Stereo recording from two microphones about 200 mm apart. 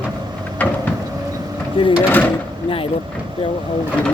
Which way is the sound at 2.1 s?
10° left (ahead or behind).